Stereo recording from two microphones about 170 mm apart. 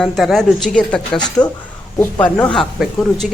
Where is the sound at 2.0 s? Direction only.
10° left (ahead or behind).